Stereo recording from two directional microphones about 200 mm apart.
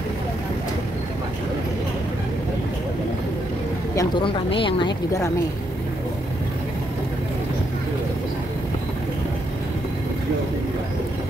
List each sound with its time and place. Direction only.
3.9 s a woman's voice: 20° left (ahead or behind)